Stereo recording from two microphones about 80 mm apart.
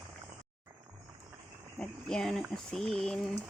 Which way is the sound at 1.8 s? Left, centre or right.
Centre.